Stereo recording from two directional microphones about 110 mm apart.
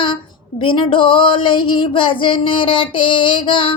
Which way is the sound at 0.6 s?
50° left (ahead or behind).